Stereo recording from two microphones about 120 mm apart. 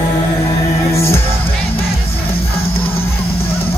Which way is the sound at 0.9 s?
20° left (ahead or behind).